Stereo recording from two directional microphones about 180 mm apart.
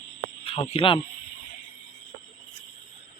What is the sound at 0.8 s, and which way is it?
Speech, 30° left (ahead or behind).